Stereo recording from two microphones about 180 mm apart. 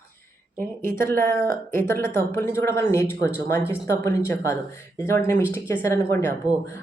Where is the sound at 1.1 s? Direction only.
10° left (ahead or behind).